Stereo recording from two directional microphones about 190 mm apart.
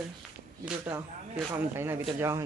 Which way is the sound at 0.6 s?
5° right (ahead or behind).